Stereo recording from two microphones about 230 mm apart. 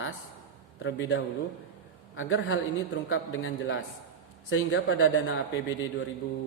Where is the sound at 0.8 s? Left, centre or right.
Left.